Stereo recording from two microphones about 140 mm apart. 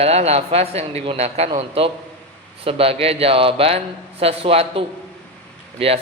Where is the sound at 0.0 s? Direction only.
50° right (ahead or behind).